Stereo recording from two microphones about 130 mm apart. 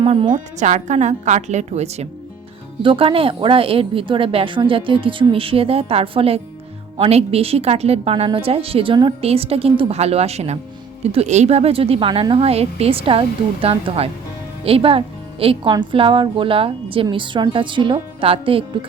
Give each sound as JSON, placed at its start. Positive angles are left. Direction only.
{"t": 0.0, "sound": "speech", "side_deg": -45}
{"t": 0.6, "sound": "a woman's voice", "side_deg": -65}
{"t": 2.8, "sound": "a woman's voice", "side_deg": -40}